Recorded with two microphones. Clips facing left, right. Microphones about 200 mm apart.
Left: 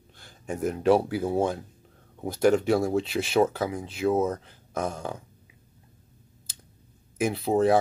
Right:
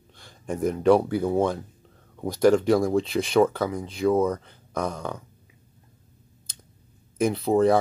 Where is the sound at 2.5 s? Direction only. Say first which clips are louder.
Right 3 dB; 25° left (ahead or behind).